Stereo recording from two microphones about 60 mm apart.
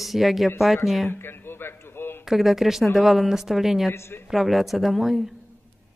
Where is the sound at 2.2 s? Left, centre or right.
Centre.